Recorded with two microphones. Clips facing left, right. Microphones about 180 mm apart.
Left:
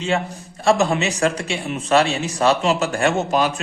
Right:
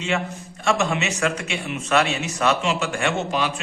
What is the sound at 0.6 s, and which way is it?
A man's voice, 35° left (ahead or behind).